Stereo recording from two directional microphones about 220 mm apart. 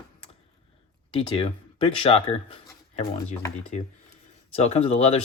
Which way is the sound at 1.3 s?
25° left (ahead or behind).